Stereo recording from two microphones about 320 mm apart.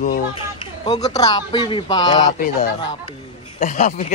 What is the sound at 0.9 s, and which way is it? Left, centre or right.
Speech, centre.